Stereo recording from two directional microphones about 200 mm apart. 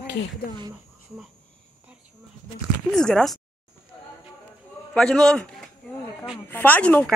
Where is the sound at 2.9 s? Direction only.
5° left (ahead or behind).